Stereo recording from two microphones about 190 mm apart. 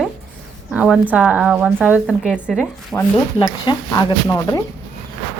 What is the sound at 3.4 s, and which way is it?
Speech, 25° left (ahead or behind).